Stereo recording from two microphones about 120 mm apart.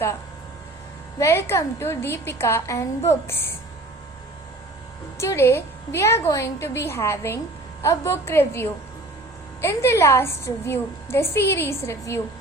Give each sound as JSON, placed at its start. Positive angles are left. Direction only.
{"t": 1.2, "sound": "a woman's voice", "side_deg": 20}
{"t": 5.1, "sound": "a woman's voice", "side_deg": 25}